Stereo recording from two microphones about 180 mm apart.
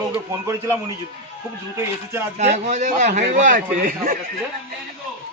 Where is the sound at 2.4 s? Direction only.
40° right (ahead or behind).